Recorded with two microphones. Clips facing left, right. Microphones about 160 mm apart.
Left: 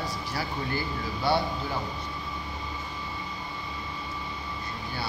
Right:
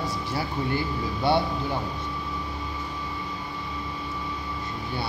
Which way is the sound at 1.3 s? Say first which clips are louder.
Right 3 dB; 25° right (ahead or behind).